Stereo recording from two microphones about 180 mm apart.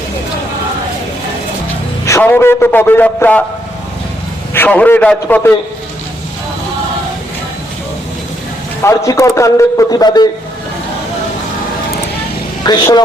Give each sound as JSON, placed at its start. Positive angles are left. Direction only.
{"t": 2.0, "sound": "a man's voice", "side_deg": 15}
{"t": 4.5, "sound": "a man's voice", "side_deg": 10}
{"t": 8.8, "sound": "a man's voice", "side_deg": 15}
{"t": 12.6, "sound": "speech", "side_deg": 25}